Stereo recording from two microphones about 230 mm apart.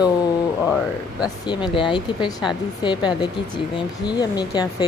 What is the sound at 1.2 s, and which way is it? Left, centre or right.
A woman's voice, centre.